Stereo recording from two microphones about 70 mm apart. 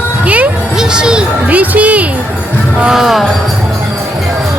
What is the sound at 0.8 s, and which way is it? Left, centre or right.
Music, centre.